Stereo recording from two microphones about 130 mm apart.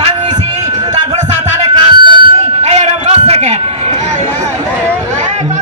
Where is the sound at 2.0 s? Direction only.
40° right (ahead or behind).